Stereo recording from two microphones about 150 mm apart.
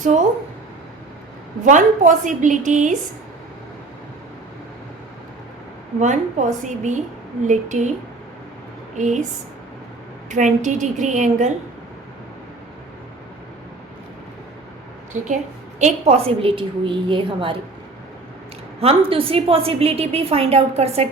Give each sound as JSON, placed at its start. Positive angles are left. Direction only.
{"t": 0.0, "sound": "a woman's voice", "side_deg": -55}
{"t": 1.6, "sound": "a woman's voice", "side_deg": -55}
{"t": 6.0, "sound": "a woman's voice", "side_deg": -55}
{"t": 9.0, "sound": "a woman's voice", "side_deg": -55}
{"t": 10.2, "sound": "a woman's voice", "side_deg": -55}
{"t": 15.1, "sound": "a woman's voice", "side_deg": -55}
{"t": 15.8, "sound": "a woman's voice", "side_deg": -45}
{"t": 18.8, "sound": "a woman's voice", "side_deg": -40}